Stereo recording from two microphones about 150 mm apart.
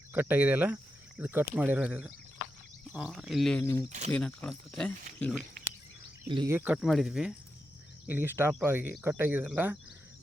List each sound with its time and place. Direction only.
0.1 s speech: 10° right (ahead or behind)
3.6 s speech: 20° left (ahead or behind)
3.8 s speech: 50° right (ahead or behind)
4.1 s speech: 10° left (ahead or behind)
6.2 s speech: 30° right (ahead or behind)
6.5 s speech: 15° right (ahead or behind)
6.8 s speech: centre (ahead or behind)